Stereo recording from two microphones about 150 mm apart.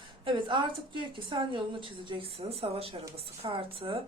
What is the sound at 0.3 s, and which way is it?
Speech, 35° right (ahead or behind).